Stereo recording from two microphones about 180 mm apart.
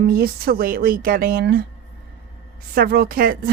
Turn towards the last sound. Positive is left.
turn(degrees=-55)  # may be behind; listen again after turning